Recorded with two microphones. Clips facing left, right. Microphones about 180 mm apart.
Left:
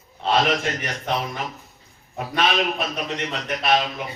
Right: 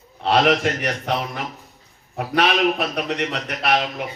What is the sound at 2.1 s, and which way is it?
A man's voice, 70° right (ahead or behind).